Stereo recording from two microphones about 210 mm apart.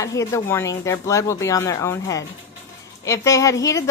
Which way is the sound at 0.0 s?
15° left (ahead or behind).